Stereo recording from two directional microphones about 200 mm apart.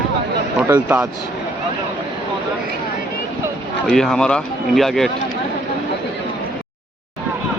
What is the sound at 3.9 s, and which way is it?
Speech, centre (ahead or behind).